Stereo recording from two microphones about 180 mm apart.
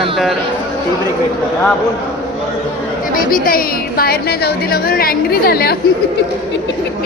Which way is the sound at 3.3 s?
55° left (ahead or behind).